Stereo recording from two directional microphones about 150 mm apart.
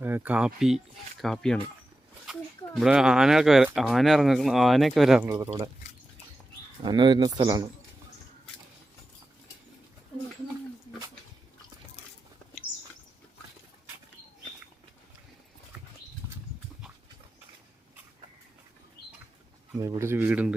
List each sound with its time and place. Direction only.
0.0 s speech: 10° right (ahead or behind)
5.2 s speech: 20° right (ahead or behind)
6.8 s speech: 30° right (ahead or behind)
16.2 s bird flight: 20° right (ahead or behind)
19.8 s speech: 20° right (ahead or behind)